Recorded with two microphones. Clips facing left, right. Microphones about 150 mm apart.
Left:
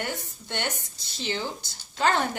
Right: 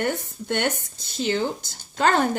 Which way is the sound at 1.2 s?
50° right (ahead or behind).